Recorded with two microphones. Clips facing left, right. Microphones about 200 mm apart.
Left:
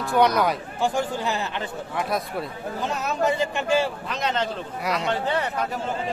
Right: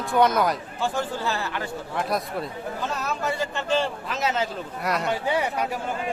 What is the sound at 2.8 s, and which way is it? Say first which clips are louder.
Speech: left 5 dB; 20° left (ahead or behind).